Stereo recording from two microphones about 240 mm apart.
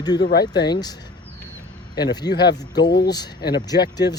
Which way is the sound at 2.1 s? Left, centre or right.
Centre.